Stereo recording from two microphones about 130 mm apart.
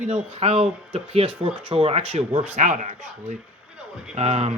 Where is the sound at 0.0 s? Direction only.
55° right (ahead or behind).